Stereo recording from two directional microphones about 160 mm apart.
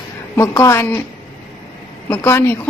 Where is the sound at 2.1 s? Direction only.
15° left (ahead or behind).